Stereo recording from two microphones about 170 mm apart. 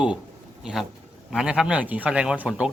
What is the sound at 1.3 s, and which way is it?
A man's voice, 5° right (ahead or behind).